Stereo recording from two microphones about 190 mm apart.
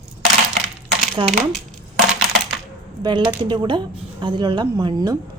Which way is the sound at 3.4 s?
25° right (ahead or behind).